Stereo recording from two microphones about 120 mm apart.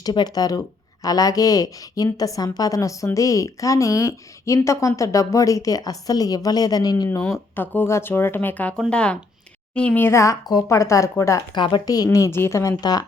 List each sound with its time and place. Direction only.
0.0 s a woman's voice: 35° left (ahead or behind)
11.5 s a woman's voice: 40° left (ahead or behind)